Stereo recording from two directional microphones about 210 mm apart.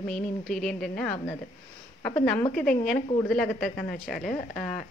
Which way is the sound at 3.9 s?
40° left (ahead or behind).